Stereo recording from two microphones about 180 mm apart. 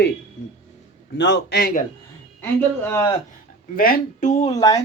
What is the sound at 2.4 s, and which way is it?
Speech, 15° left (ahead or behind).